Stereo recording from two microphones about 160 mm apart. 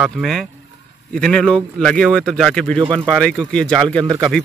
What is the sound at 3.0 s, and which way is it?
Speech, 5° left (ahead or behind).